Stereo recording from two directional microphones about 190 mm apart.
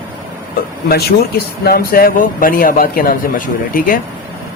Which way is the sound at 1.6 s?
55° left (ahead or behind).